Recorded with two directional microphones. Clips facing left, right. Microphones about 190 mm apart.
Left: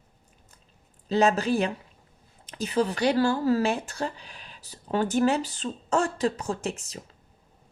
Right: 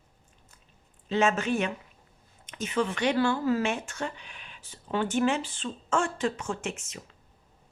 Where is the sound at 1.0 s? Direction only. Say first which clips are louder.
Left 3 dB; 35° left (ahead or behind).